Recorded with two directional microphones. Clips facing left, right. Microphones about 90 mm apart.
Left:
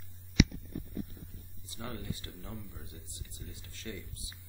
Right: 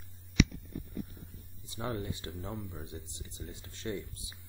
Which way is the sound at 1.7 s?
25° right (ahead or behind).